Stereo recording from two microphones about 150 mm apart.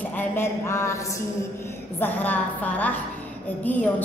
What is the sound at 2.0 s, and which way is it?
A woman's voice, 10° left (ahead or behind).